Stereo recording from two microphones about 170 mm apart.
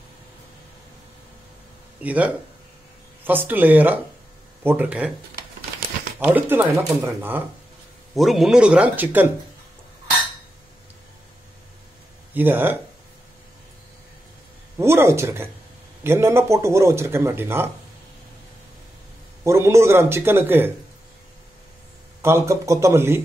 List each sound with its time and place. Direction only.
2.0 s speech: 10° right (ahead or behind)
6.1 s speech: 10° right (ahead or behind)
8.1 s speech: centre (ahead or behind)
12.4 s speech: 10° right (ahead or behind)
14.8 s speech: 15° right (ahead or behind)
19.4 s speech: 15° right (ahead or behind)
22.2 s speech: 15° right (ahead or behind)